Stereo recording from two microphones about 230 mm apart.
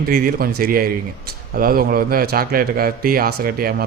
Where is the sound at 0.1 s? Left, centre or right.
Right.